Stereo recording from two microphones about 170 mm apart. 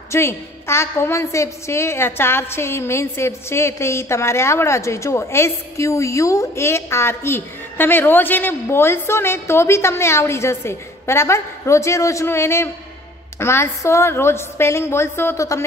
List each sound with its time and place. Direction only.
0.1 s a woman's voice: 15° left (ahead or behind)